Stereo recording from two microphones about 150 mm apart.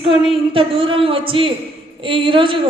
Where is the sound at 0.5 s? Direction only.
35° right (ahead or behind).